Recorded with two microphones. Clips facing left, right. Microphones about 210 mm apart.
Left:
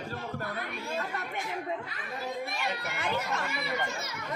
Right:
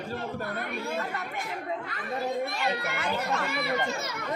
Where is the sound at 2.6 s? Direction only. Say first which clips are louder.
Right 4 dB; 60° right (ahead or behind).